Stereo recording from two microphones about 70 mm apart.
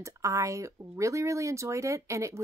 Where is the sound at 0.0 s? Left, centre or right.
Right.